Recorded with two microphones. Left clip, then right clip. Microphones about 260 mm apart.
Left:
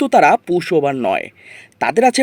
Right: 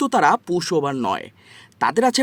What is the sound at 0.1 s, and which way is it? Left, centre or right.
Speech, right.